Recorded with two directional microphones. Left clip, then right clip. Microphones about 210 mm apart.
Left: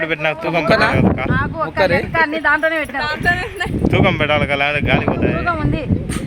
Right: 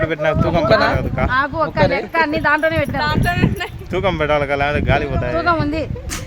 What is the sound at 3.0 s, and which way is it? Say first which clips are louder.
Speech: left 1 dB; 15° right (ahead or behind).